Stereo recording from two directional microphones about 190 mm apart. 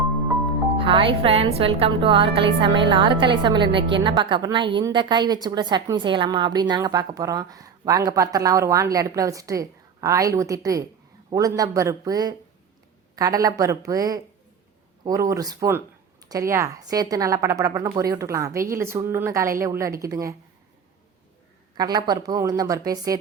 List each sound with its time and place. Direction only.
0.8 s a woman's voice: 25° right (ahead or behind)
21.8 s a woman's voice: 20° right (ahead or behind)